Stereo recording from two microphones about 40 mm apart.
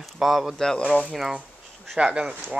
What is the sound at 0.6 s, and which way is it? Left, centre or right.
Speech, centre.